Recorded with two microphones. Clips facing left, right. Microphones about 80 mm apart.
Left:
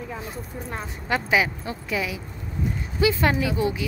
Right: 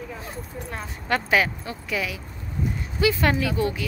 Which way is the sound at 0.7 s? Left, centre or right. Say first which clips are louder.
Right 1 dB; centre.